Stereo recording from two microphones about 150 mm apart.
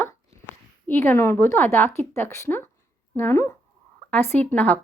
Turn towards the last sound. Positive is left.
turn(degrees=10)  # may be behind; listen again after turning